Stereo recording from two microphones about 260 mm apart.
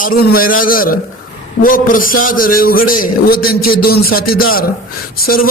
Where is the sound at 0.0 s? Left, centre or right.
Left.